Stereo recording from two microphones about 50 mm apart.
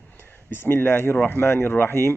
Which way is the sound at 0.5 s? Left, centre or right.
Left.